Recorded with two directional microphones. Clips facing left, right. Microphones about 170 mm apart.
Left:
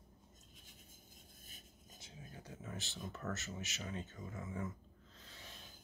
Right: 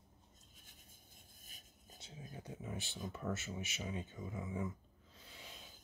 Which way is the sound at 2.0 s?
20° right (ahead or behind).